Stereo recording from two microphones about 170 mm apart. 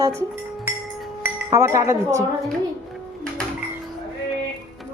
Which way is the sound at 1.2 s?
15° right (ahead or behind).